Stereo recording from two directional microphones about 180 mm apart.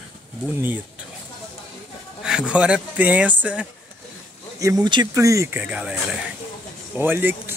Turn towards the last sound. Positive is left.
turn(degrees=-10)  # may be behind; listen again after turning